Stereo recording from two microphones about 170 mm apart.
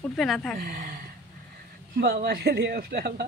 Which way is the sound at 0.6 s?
55° right (ahead or behind).